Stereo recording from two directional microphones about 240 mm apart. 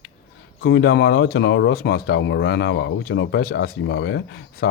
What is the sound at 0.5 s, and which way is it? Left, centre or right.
Speech, left.